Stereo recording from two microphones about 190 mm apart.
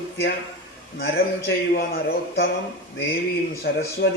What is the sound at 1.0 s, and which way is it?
A man's voice, 55° left (ahead or behind).